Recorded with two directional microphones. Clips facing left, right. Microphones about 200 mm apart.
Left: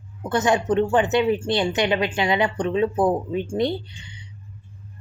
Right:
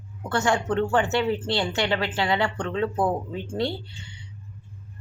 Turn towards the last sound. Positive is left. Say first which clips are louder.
# left 5 dB
turn(degrees=20)  # may be behind; listen again after turning